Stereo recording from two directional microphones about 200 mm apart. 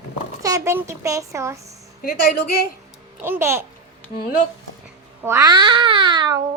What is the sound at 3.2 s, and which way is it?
Speech, 10° right (ahead or behind).